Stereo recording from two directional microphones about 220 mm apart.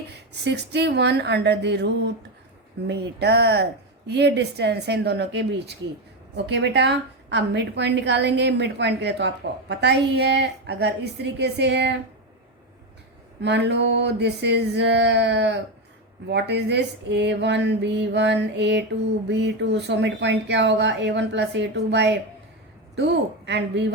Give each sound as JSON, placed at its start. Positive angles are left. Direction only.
{"t": 0.1, "sound": "a woman's voice", "side_deg": -50}
{"t": 13.4, "sound": "a woman's voice", "side_deg": -50}